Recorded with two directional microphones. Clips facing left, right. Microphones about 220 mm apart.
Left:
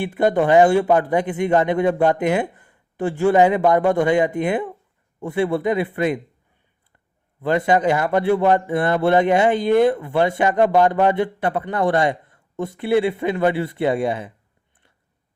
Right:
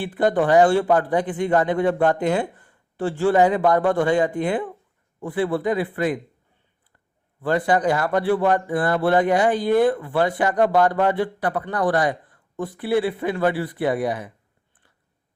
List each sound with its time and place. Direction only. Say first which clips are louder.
0.0 s a man's voice: left 2 dB; 20° left (ahead or behind)
7.4 s a man's voice: left 2 dB; 20° left (ahead or behind)